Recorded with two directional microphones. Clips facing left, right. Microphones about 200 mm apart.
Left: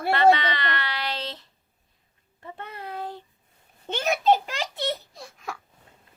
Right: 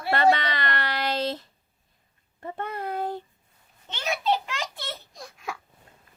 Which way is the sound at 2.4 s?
50° right (ahead or behind).